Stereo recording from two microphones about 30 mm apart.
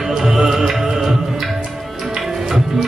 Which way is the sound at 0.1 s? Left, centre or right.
Centre.